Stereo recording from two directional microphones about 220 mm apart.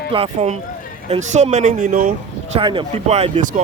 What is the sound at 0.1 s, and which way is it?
Speech, 25° right (ahead or behind).